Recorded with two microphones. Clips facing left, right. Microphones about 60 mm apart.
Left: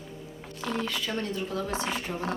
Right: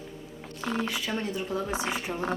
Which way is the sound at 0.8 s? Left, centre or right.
Centre.